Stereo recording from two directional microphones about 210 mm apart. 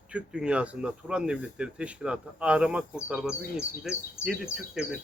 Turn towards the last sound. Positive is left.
turn(degrees=-5)  # may be behind; listen again after turning